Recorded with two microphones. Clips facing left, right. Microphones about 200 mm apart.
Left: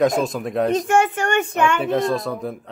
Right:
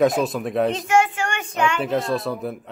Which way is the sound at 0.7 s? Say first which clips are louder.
Left 2 dB; 55° left (ahead or behind).